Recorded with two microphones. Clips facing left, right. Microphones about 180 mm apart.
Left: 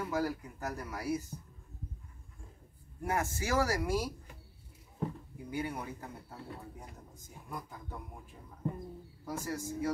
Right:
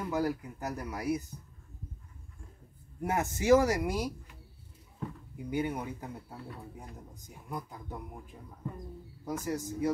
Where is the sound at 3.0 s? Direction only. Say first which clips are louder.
Right 3 dB; 20° right (ahead or behind).